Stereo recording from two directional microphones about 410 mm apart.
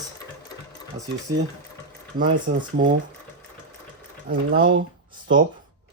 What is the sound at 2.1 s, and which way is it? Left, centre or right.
Speech, centre.